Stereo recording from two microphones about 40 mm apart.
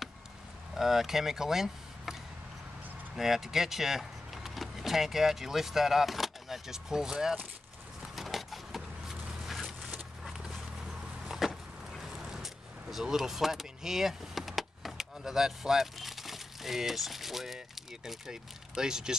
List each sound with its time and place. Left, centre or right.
0.7 s speech: centre
3.2 s speech: centre
8.2 s a sound: centre
9.9 s vehicle: centre
11.2 s a sound: centre
12.0 s vehicle: centre
18.0 s speech: centre